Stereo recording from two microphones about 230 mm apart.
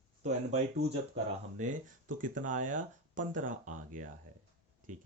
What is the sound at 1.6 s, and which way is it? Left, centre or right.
Speech, right.